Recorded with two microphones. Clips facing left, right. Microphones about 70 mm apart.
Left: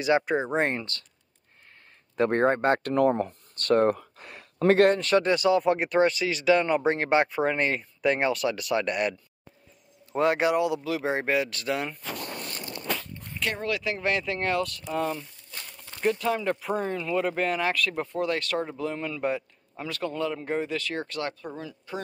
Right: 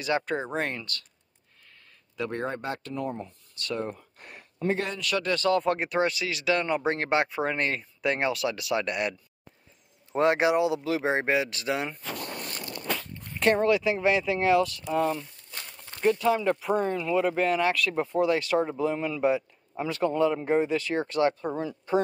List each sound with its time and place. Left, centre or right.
0.0 s speech: centre
2.1 s speech: left
4.6 s speech: left
5.0 s speech: left
5.3 s speech: centre
10.1 s speech: right
13.4 s speech: right
13.7 s speech: centre
19.7 s speech: centre